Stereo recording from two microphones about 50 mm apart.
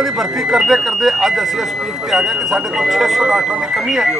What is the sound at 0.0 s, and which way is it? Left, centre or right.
Speech, centre.